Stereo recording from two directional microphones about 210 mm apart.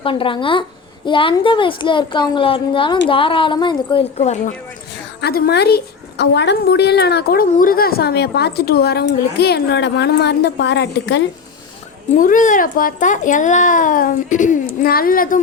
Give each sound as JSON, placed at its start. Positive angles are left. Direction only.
{"t": 0.0, "sound": "a woman's voice", "side_deg": 25}
{"t": 5.2, "sound": "a woman's voice", "side_deg": 50}
{"t": 12.1, "sound": "a child's voice", "side_deg": 40}